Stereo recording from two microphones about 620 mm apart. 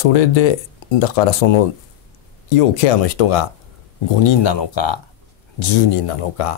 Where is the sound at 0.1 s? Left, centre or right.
Left.